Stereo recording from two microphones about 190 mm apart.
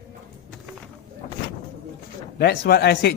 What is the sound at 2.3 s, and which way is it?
Speech, 60° left (ahead or behind).